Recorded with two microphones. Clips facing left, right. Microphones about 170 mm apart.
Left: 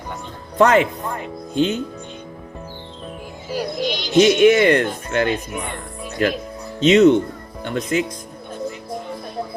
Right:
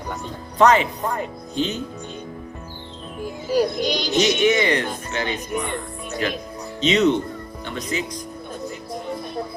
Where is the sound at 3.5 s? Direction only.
40° right (ahead or behind).